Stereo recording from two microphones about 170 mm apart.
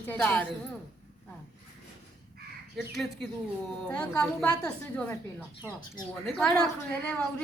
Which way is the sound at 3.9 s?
10° left (ahead or behind).